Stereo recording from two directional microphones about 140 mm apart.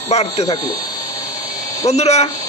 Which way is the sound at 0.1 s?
50° left (ahead or behind).